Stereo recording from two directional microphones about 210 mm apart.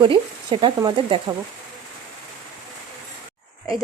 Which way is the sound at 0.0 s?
25° right (ahead or behind).